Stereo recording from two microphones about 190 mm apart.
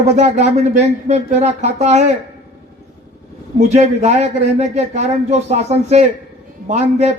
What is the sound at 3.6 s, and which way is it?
A man's voice, 35° right (ahead or behind).